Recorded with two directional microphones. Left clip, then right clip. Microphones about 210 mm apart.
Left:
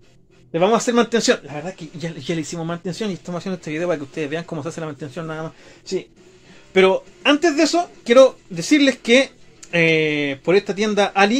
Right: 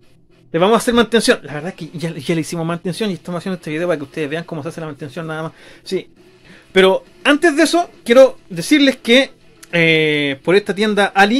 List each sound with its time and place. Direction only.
0.5 s speech: 25° right (ahead or behind)
1.5 s speech: 40° right (ahead or behind)
8.0 s speech: 15° right (ahead or behind)